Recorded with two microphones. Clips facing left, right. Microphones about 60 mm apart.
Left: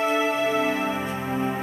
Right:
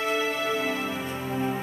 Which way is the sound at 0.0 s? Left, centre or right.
Left.